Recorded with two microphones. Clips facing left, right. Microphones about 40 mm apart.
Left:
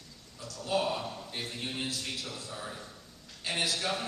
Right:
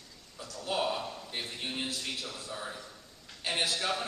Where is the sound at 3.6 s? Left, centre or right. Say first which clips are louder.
Even; centre.